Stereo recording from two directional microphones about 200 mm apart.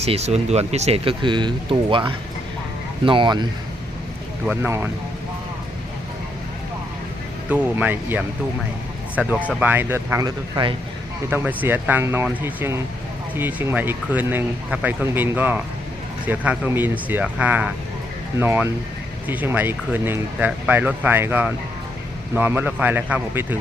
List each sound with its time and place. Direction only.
0.0 s speech: 30° right (ahead or behind)
4.4 s speech: 10° right (ahead or behind)
7.5 s speech: 10° right (ahead or behind)
11.3 s speech: 10° right (ahead or behind)